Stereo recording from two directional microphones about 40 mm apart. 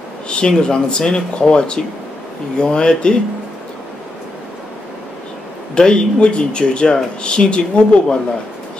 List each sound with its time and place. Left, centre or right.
0.3 s speech: left
5.8 s speech: left